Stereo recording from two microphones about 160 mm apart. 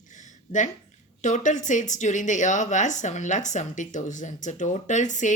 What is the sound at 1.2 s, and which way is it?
Speech, 50° left (ahead or behind).